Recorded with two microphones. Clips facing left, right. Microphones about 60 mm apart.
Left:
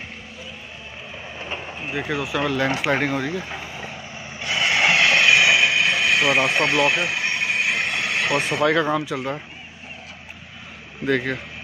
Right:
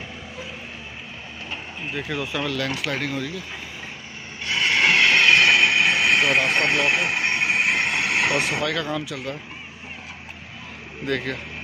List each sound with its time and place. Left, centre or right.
1.9 s speech: centre
2.7 s speech: left
4.4 s vehicle: centre
8.6 s speech: left
11.1 s speech: centre